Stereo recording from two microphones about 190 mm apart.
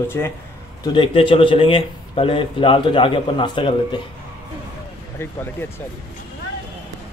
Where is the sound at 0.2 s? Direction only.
15° left (ahead or behind).